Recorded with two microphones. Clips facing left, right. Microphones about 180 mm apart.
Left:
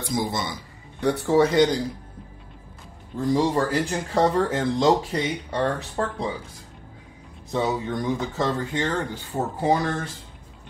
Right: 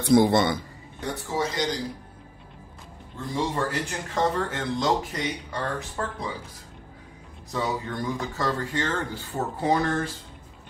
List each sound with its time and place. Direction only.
0.0 s a man's voice: 65° right (ahead or behind)
1.0 s a man's voice: 65° left (ahead or behind)
3.3 s speech: 35° left (ahead or behind)
7.5 s speech: 20° left (ahead or behind)